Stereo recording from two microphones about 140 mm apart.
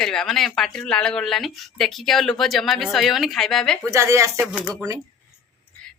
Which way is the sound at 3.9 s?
20° right (ahead or behind).